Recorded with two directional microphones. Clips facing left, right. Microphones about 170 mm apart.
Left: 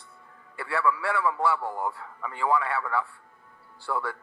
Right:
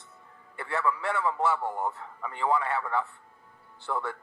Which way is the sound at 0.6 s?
20° right (ahead or behind).